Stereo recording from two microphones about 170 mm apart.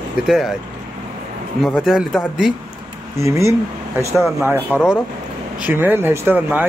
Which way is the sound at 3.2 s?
15° right (ahead or behind).